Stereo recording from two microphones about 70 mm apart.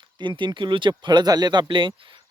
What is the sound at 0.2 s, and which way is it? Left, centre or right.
Speech, right.